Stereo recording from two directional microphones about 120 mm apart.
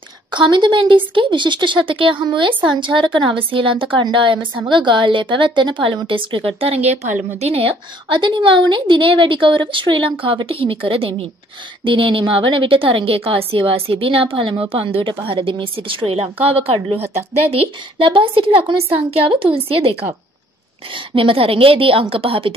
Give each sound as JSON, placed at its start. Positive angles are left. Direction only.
{"t": 0.3, "sound": "a woman's voice", "side_deg": -40}